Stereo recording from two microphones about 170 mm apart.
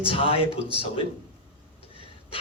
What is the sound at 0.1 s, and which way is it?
Speech, 35° left (ahead or behind).